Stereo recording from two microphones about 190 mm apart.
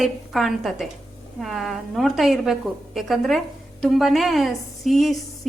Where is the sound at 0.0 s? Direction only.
Centre (ahead or behind).